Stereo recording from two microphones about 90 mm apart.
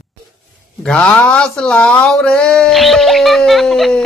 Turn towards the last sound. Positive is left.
turn(degrees=0)  # may be behind; listen again after turning